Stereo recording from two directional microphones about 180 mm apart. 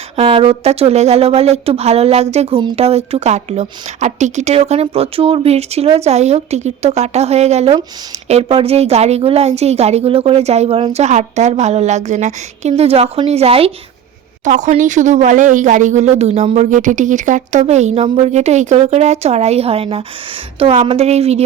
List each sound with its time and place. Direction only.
0.2 s speech: 30° right (ahead or behind)